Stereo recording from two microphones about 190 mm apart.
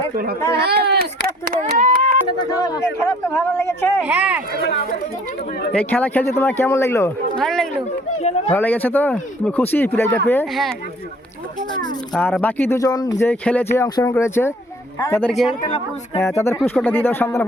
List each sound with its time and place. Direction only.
0.5 s speech: 60° right (ahead or behind)
2.5 s speech: 20° left (ahead or behind)
4.0 s speech: 10° right (ahead or behind)
4.6 s speech: 50° left (ahead or behind)
5.7 s speech: 10° left (ahead or behind)
7.3 s speech: centre (ahead or behind)
10.5 s speech: centre (ahead or behind)
12.1 s speech: 5° left (ahead or behind)
13.7 s speech: 15° left (ahead or behind)